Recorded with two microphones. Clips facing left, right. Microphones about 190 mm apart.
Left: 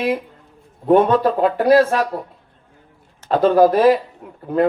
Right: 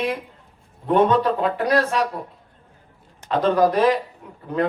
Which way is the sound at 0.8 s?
40° left (ahead or behind).